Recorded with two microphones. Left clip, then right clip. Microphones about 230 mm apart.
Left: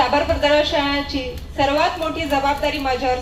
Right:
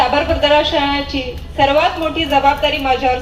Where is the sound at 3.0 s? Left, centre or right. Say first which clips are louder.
Right 4 dB; right.